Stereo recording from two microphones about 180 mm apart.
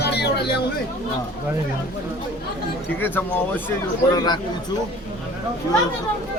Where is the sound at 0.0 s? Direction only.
65° left (ahead or behind).